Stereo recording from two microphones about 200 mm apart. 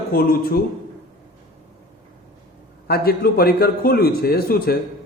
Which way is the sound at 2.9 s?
50° left (ahead or behind).